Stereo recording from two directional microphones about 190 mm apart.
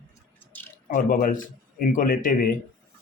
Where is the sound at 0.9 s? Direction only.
45° left (ahead or behind).